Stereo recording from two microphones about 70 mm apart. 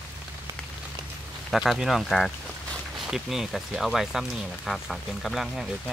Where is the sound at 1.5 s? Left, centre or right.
Centre.